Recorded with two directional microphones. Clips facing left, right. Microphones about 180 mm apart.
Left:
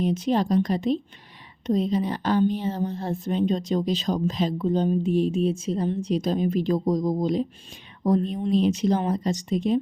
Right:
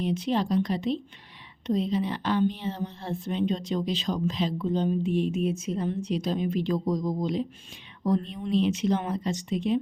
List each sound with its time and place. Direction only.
0.0 s a woman's voice: 45° left (ahead or behind)